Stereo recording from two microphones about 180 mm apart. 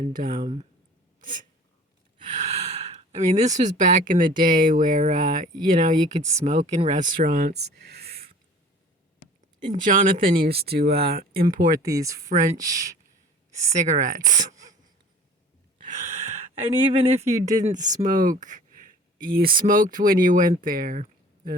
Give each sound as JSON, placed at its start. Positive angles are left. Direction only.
{"t": 0.0, "sound": "speech", "side_deg": -50}
{"t": 1.2, "sound": "a sound", "side_deg": -50}
{"t": 2.2, "sound": "speech", "side_deg": -40}
{"t": 9.6, "sound": "speech", "side_deg": -45}
{"t": 11.8, "sound": "speech", "side_deg": -20}
{"t": 12.3, "sound": "speech", "side_deg": -45}
{"t": 12.5, "sound": "speech", "side_deg": -20}
{"t": 13.7, "sound": "speech", "side_deg": -45}
{"t": 14.3, "sound": "a sound", "side_deg": -45}
{"t": 15.8, "sound": "speech", "side_deg": -40}